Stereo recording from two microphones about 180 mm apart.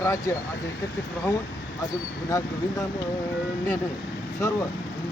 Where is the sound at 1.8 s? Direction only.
20° left (ahead or behind).